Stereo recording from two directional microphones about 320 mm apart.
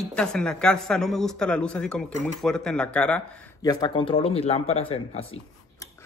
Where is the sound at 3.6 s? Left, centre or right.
Centre.